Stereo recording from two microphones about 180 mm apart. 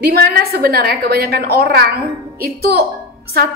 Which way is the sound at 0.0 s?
60° right (ahead or behind).